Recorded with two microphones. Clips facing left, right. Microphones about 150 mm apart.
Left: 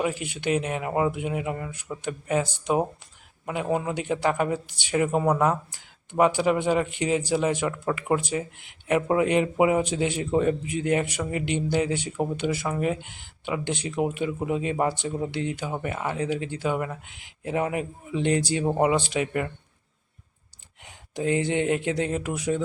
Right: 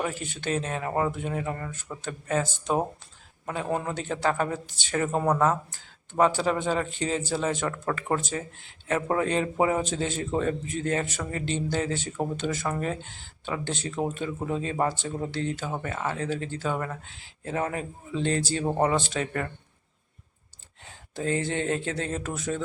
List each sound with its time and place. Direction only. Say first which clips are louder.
0.0 s speech: left 4 dB; 15° left (ahead or behind)
20.8 s speech: left 3 dB; 15° left (ahead or behind)